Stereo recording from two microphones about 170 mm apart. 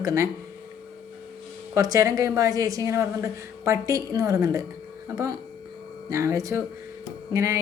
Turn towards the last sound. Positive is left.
turn(degrees=-15)  # may be behind; listen again after turning